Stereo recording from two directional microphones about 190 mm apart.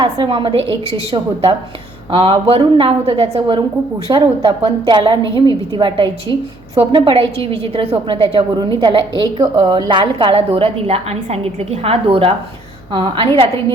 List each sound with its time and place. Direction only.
0.0 s a woman's voice: 25° right (ahead or behind)
2.0 s a woman's voice: 25° right (ahead or behind)
5.2 s a woman's voice: 20° left (ahead or behind)
5.7 s a woman's voice: 25° right (ahead or behind)